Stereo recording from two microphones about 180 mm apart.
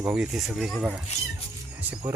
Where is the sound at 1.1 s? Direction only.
35° left (ahead or behind).